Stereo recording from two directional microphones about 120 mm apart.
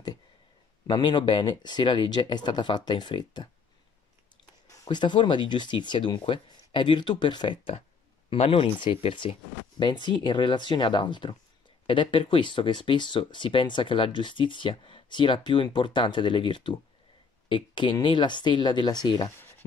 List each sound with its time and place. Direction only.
0.8 s speech: 40° left (ahead or behind)
4.8 s speech: 40° left (ahead or behind)